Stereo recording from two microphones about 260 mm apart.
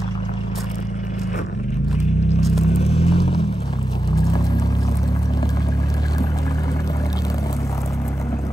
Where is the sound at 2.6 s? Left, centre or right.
Left.